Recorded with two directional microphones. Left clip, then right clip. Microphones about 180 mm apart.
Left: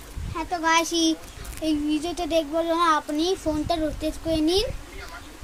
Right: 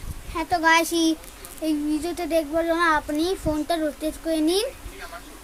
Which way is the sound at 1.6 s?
5° right (ahead or behind).